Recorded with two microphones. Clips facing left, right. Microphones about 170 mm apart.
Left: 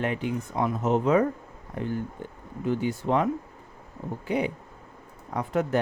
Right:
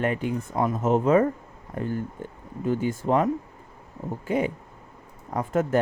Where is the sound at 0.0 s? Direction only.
45° right (ahead or behind).